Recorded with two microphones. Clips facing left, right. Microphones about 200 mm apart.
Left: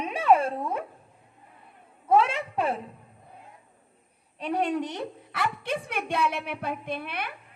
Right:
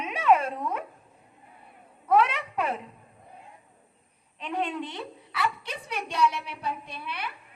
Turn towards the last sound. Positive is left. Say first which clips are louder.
# left 4 dB
turn(degrees=55)  # may be behind; listen again after turning